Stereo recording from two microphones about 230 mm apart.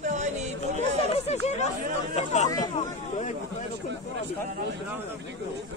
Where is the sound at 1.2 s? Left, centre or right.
Left.